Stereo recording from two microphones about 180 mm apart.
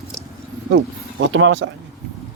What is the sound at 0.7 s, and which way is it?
Speech, 90° right.